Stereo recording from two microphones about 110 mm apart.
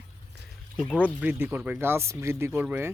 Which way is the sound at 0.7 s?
5° right (ahead or behind).